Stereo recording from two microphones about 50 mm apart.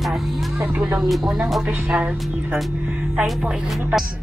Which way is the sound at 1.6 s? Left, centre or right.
Right.